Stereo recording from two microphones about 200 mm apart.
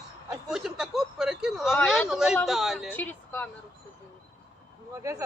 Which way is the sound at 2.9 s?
10° left (ahead or behind).